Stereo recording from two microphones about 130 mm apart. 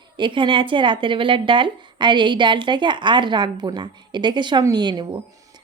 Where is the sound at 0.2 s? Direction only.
40° right (ahead or behind).